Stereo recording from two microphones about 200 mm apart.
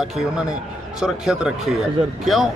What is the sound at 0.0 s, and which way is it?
Speech, centre (ahead or behind).